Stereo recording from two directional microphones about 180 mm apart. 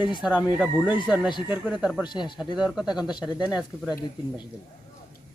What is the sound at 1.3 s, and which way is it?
Speech, 25° left (ahead or behind).